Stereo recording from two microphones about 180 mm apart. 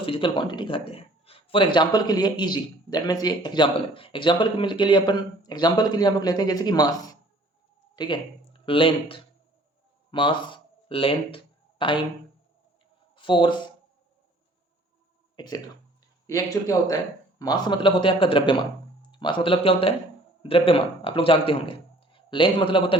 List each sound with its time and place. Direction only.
0.0 s a man's voice: 30° left (ahead or behind)
13.1 s speech: 25° left (ahead or behind)
15.4 s a man's voice: 25° left (ahead or behind)